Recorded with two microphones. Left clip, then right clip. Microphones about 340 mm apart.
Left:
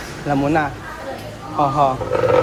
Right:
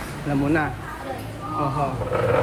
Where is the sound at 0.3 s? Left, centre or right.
Centre.